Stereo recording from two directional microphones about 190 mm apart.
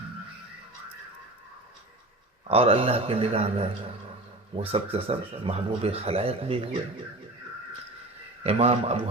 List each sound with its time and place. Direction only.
2.5 s a man's voice: 30° right (ahead or behind)
8.4 s a man's voice: 35° right (ahead or behind)